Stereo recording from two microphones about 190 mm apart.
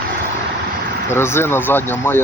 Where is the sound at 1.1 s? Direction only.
15° left (ahead or behind).